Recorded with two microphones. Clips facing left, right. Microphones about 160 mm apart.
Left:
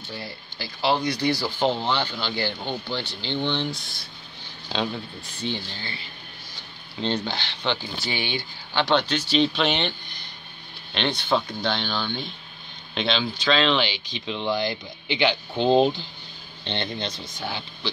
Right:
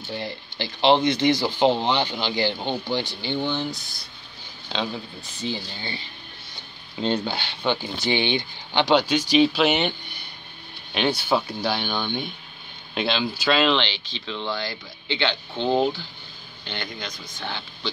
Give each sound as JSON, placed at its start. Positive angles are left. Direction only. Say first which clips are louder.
{"t": 0.1, "sound": "speech", "louder": "right 5 dB", "side_deg": -25}
{"t": 7.2, "sound": "speech", "louder": "right 2 dB", "side_deg": -10}
{"t": 13.7, "sound": "speech", "louder": "left 1 dB", "side_deg": 10}
{"t": 17.4, "sound": "speech", "louder": "left 1 dB", "side_deg": 15}